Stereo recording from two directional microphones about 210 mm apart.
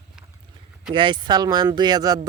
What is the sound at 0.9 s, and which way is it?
Speech, 20° right (ahead or behind).